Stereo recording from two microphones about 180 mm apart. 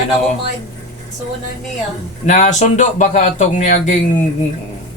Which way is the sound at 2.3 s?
40° left (ahead or behind).